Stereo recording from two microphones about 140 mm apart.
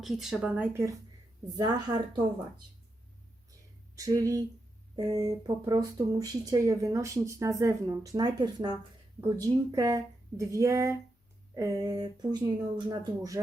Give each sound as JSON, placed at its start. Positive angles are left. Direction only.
{"t": 0.0, "sound": "speech", "side_deg": 0}
{"t": 1.5, "sound": "a woman's voice", "side_deg": -30}
{"t": 3.9, "sound": "speech", "side_deg": -25}